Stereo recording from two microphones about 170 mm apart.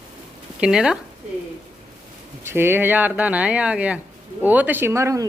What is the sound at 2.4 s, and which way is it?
Speech, 15° right (ahead or behind).